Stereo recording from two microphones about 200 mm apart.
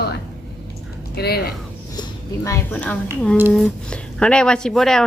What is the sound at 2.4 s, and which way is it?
A woman's voice, 10° left (ahead or behind).